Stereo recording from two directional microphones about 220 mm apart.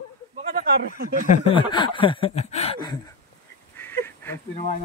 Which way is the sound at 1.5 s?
20° left (ahead or behind).